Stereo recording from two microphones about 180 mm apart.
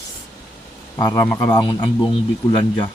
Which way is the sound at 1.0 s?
20° left (ahead or behind).